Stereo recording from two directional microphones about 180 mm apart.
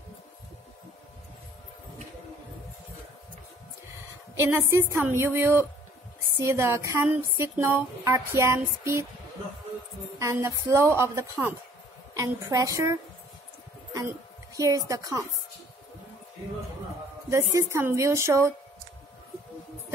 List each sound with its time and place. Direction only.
4.4 s music: 15° right (ahead or behind)
10.1 s music: 15° right (ahead or behind)
13.9 s a woman's voice: 20° right (ahead or behind)
17.3 s music: 15° right (ahead or behind)